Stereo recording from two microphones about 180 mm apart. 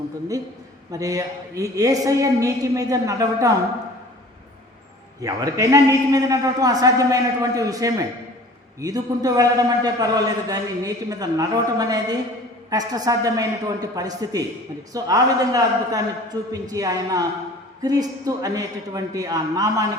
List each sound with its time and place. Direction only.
0.9 s a man's voice: 20° right (ahead or behind)
5.2 s a man's voice: 20° right (ahead or behind)